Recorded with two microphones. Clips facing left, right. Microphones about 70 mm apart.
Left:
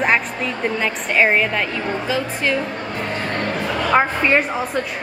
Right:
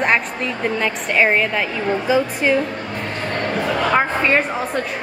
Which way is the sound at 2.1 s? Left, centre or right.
Centre.